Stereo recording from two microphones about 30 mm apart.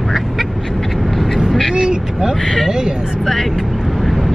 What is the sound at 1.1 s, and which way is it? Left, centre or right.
Vehicle, centre.